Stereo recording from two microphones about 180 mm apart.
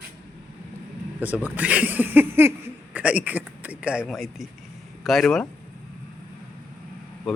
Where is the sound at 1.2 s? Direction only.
10° right (ahead or behind).